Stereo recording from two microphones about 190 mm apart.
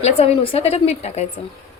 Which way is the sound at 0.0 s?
30° left (ahead or behind).